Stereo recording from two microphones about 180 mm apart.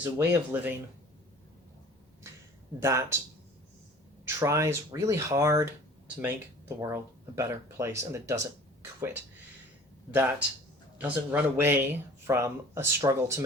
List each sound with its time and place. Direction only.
0.0 s speech: 10° right (ahead or behind)
2.3 s a sound: 15° right (ahead or behind)
2.8 s speech: 15° right (ahead or behind)
4.4 s speech: 15° right (ahead or behind)
8.8 s a sound: 15° right (ahead or behind)
10.9 s speech: 10° right (ahead or behind)